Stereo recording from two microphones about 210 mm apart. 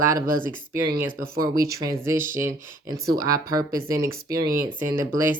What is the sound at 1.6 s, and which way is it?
Speech, 15° right (ahead or behind).